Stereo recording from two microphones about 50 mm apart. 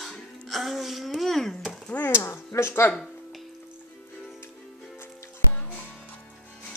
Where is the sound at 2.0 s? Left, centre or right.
Left.